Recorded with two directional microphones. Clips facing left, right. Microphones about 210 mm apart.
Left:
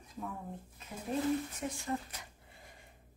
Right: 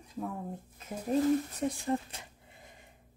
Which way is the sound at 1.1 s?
40° right (ahead or behind).